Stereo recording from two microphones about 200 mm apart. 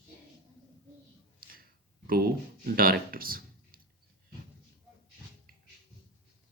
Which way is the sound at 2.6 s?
45° right (ahead or behind).